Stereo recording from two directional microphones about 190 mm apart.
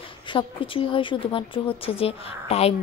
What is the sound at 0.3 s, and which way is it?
Speech, 25° left (ahead or behind).